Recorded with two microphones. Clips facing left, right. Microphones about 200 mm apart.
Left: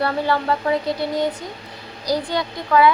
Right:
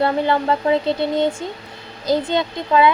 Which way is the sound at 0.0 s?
20° right (ahead or behind).